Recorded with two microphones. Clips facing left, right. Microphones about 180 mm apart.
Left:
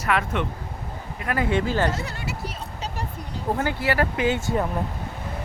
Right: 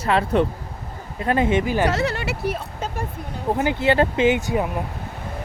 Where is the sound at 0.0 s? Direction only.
30° right (ahead or behind); by 1.9 s 15° right (ahead or behind).